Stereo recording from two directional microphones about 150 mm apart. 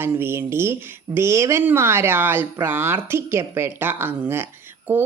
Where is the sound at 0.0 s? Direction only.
15° right (ahead or behind).